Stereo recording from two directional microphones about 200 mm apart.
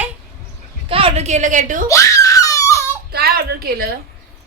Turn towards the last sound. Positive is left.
turn(degrees=-50)  # may be behind; listen again after turning